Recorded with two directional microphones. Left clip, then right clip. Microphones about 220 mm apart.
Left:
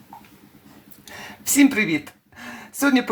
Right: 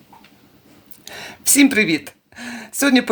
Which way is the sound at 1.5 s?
40° right (ahead or behind).